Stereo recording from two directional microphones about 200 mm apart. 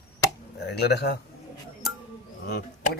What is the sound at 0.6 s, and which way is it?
Speech, 55° left (ahead or behind).